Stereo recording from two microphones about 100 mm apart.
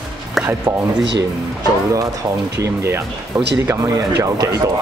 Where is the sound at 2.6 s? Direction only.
25° right (ahead or behind).